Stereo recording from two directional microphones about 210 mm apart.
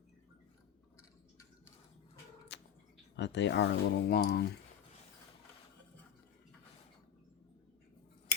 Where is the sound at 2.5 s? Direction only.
55° left (ahead or behind).